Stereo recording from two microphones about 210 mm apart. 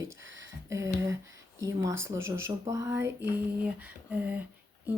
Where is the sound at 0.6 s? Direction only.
15° right (ahead or behind).